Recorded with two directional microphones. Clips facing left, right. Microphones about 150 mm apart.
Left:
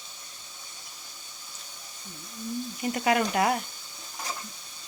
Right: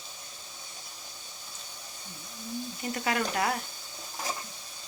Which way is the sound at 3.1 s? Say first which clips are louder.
Left 5 dB; 15° left (ahead or behind).